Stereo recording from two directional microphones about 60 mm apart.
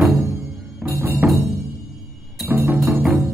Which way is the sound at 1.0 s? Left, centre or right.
Right.